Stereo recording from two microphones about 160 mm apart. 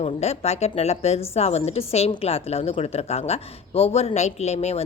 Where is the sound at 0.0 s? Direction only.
40° left (ahead or behind).